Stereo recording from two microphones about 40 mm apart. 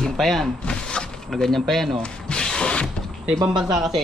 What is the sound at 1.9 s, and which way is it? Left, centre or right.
Wood, left.